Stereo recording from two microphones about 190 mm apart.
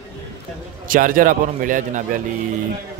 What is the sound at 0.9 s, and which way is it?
A man's voice, 45° right (ahead or behind).